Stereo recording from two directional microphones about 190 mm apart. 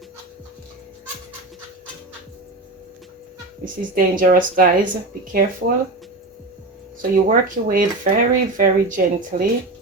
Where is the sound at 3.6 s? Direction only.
45° right (ahead or behind).